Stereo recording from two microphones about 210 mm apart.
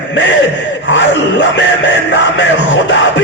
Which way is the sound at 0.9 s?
60° left (ahead or behind).